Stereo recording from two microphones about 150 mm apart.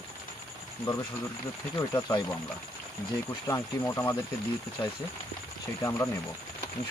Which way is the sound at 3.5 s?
15° left (ahead or behind).